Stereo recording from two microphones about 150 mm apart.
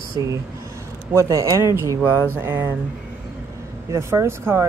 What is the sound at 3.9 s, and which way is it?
Speech, 20° right (ahead or behind).